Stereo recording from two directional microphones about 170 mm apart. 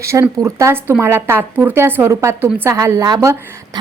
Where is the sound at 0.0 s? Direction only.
15° right (ahead or behind).